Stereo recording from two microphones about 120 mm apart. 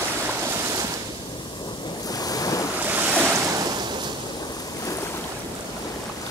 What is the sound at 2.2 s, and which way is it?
Waves, 30° left (ahead or behind).